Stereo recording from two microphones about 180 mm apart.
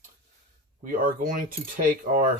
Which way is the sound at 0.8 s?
50° right (ahead or behind).